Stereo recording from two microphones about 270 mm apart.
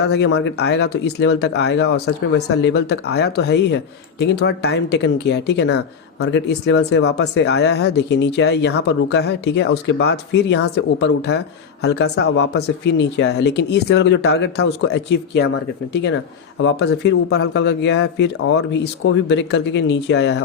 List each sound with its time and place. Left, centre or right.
0.0 s speech: left